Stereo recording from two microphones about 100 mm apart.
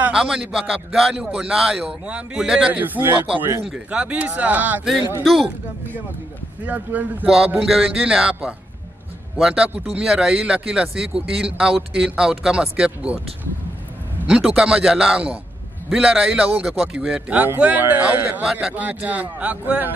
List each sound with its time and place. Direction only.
0.0 s speech: 5° right (ahead or behind)
2.8 s a man's voice: 20° right (ahead or behind)
3.6 s speech: 5° right (ahead or behind)
5.2 s speech: centre (ahead or behind)
6.6 s speech: 15° right (ahead or behind)
7.2 s speech: 5° right (ahead or behind)
14.4 s speech: 5° right (ahead or behind)